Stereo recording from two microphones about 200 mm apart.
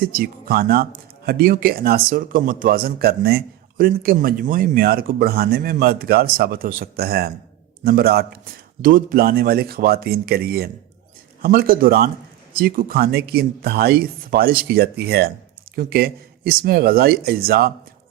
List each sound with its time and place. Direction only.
0.0 s speech: 50° right (ahead or behind)